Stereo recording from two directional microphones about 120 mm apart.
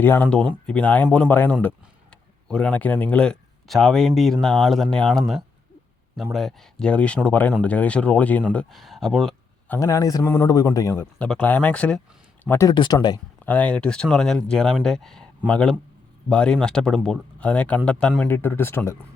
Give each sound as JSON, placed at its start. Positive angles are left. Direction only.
{"t": 0.0, "sound": "speech", "side_deg": 15}
{"t": 8.5, "sound": "speech", "side_deg": 0}
{"t": 9.8, "sound": "speech", "side_deg": 30}
{"t": 10.2, "sound": "speech", "side_deg": 20}
{"t": 11.2, "sound": "speech", "side_deg": 10}
{"t": 12.5, "sound": "speech", "side_deg": 25}
{"t": 12.7, "sound": "speech", "side_deg": 40}
{"t": 13.4, "sound": "speech", "side_deg": 15}